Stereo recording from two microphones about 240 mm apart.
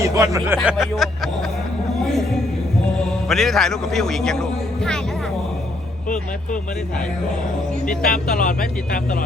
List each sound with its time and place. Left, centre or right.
0.0 s a man's voice: centre
3.2 s a man's voice: centre
8.0 s speech: left